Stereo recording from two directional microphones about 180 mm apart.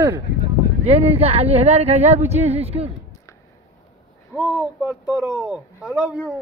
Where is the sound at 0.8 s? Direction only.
35° right (ahead or behind).